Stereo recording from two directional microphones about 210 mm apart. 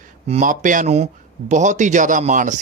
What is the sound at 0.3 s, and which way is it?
Speech, 35° right (ahead or behind).